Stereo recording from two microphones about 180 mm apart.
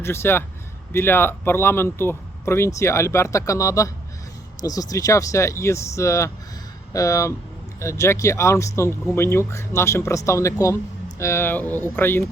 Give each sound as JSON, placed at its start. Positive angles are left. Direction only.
{"t": 0.0, "sound": "speech", "side_deg": 15}